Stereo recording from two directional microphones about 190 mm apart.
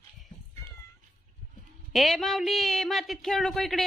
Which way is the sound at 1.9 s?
Centre (ahead or behind).